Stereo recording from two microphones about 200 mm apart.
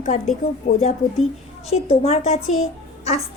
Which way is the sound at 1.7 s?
30° left (ahead or behind).